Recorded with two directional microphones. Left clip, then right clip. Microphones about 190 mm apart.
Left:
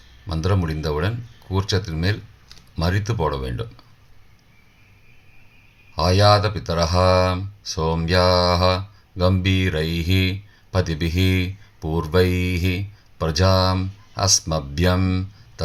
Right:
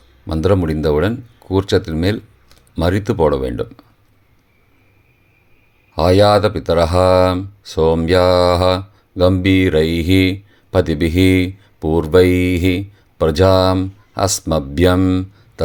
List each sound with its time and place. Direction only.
0.3 s speech: 40° right (ahead or behind)
5.9 s speech: 45° right (ahead or behind)